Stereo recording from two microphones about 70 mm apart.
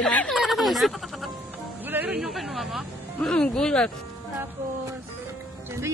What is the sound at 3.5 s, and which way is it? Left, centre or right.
Speech, centre.